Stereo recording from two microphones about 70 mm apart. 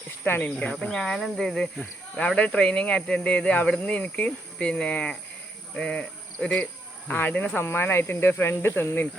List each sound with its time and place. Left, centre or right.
0.3 s speech: left
0.6 s speech: centre
7.1 s speech: left